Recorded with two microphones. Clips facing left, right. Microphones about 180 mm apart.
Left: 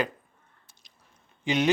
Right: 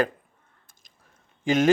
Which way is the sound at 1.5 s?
45° right (ahead or behind).